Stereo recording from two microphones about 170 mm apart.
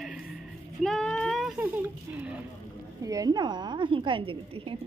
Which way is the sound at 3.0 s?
20° right (ahead or behind).